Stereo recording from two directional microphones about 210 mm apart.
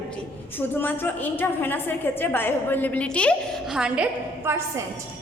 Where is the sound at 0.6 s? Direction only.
10° left (ahead or behind); by 4.8 s 10° right (ahead or behind).